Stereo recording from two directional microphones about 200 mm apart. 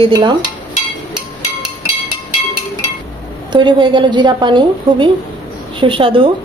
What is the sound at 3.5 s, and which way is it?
A woman's voice, 25° right (ahead or behind).